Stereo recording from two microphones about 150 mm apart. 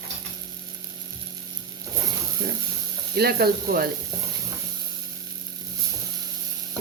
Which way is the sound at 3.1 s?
90° right.